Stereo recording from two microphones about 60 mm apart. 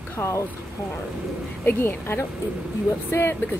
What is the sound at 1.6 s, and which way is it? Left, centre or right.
Speech, left.